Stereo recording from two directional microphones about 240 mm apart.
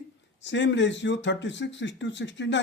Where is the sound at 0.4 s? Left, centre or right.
Left.